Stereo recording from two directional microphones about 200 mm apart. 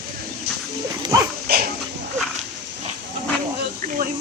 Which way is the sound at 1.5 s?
50° right (ahead or behind).